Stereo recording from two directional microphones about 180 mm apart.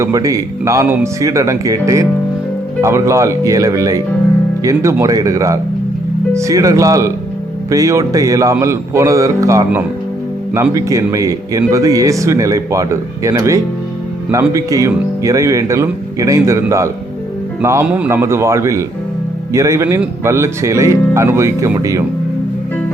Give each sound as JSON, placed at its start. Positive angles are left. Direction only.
{"t": 0.0, "sound": "speech", "side_deg": -20}